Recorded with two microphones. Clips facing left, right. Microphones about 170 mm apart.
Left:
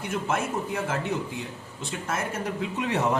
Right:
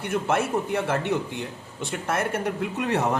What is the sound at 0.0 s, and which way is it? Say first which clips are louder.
A man's voice: right 4 dB; 65° right (ahead or behind).